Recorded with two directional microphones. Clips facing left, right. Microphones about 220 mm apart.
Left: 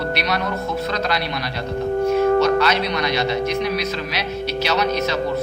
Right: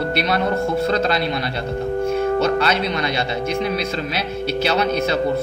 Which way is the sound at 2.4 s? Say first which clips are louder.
Left 1 dB; 30° right (ahead or behind).